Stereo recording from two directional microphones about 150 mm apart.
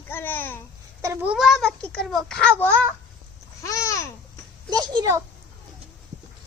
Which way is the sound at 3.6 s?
20° left (ahead or behind).